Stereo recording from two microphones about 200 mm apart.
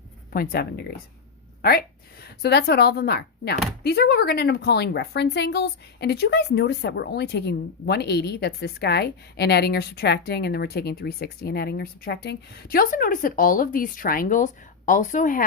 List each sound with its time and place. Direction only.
0.3 s a woman's voice: 50° left (ahead or behind)